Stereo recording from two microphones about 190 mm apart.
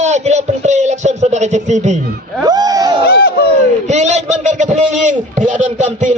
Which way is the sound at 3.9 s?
35° right (ahead or behind).